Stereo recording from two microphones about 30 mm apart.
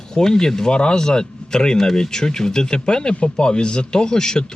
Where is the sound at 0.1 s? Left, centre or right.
Left.